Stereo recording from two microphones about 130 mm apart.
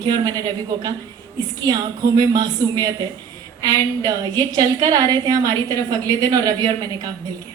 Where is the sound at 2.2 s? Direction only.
30° right (ahead or behind).